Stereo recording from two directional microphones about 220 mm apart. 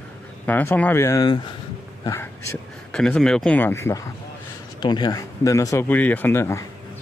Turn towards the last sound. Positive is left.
turn(degrees=10)  # may be behind; listen again after turning